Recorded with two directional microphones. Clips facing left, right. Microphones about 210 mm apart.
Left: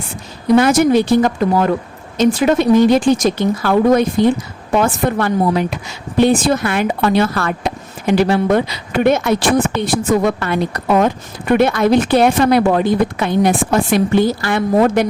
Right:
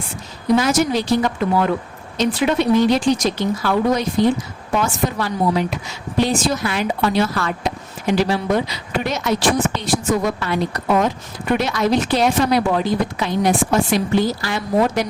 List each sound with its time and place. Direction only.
0.5 s a woman's voice: 55° left (ahead or behind)
1.4 s a woman's voice: 45° left (ahead or behind)